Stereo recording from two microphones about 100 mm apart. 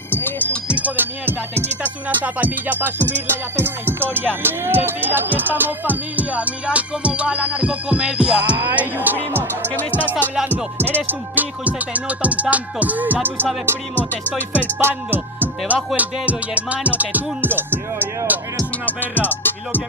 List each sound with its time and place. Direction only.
0.1 s music: 20° left (ahead or behind)
0.7 s music: 15° right (ahead or behind)
9.8 s music: 15° left (ahead or behind)
10.8 s music: 20° right (ahead or behind)
14.8 s speech: 20° right (ahead or behind)
16.0 s music: 15° right (ahead or behind)
18.9 s music: 20° left (ahead or behind)